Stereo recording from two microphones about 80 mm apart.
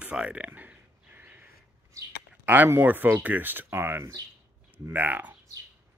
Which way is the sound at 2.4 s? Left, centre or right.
Right.